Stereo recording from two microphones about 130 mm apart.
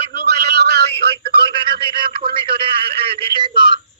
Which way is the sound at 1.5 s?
40° right (ahead or behind).